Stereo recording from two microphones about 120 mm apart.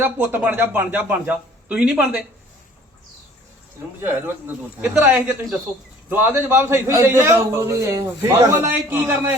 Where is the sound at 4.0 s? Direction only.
15° right (ahead or behind).